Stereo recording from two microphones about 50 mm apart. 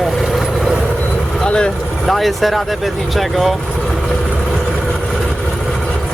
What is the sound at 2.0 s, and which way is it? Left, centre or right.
Speech, centre.